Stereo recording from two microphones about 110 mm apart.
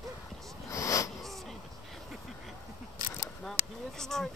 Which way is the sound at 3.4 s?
5° left (ahead or behind).